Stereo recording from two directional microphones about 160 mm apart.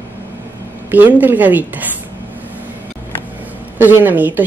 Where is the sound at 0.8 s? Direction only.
10° right (ahead or behind).